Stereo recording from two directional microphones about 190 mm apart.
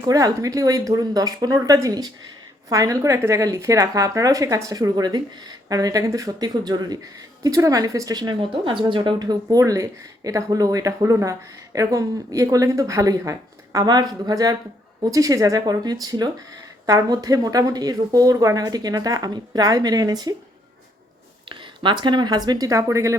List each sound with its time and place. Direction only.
0.0 s speech: 20° right (ahead or behind)
21.5 s speech: 25° right (ahead or behind)